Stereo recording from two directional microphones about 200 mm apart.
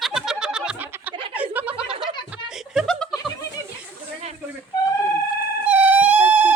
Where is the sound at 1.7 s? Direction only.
25° right (ahead or behind).